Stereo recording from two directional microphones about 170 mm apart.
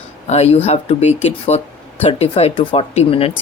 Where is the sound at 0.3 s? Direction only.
40° left (ahead or behind).